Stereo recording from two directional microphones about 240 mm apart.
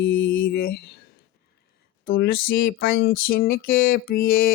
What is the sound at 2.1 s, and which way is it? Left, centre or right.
Speech, left.